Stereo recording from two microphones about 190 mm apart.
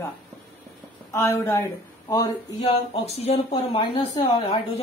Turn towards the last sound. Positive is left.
turn(degrees=30)  # may be behind; listen again after turning